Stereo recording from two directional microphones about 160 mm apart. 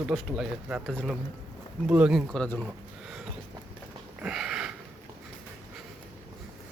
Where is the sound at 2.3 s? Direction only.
10° left (ahead or behind).